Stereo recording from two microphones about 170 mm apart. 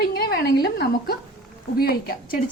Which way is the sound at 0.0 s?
65° left (ahead or behind).